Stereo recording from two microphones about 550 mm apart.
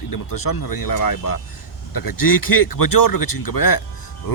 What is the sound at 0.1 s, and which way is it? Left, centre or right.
Speech, left.